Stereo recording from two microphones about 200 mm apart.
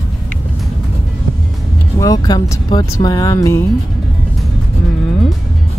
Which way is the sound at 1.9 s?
15° left (ahead or behind).